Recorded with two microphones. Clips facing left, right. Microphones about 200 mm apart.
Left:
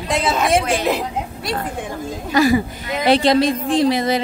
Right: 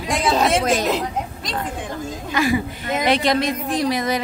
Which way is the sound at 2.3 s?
40° left (ahead or behind).